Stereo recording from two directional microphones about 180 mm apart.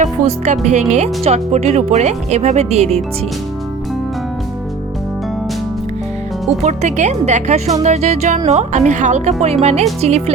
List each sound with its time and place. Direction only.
0.0 s speech: 40° right (ahead or behind)
6.6 s speech: 40° right (ahead or behind)